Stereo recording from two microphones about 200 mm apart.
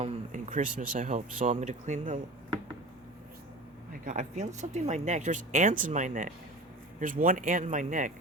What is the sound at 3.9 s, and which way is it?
Speech, 40° right (ahead or behind).